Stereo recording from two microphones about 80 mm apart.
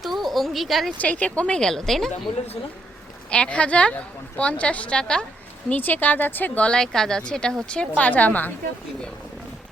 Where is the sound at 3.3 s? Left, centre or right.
Centre.